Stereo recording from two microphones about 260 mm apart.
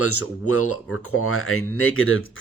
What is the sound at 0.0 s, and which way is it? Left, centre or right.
Speech, left.